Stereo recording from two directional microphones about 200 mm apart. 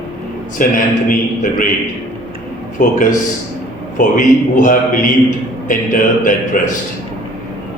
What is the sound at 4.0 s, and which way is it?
A man's voice, 40° left (ahead or behind).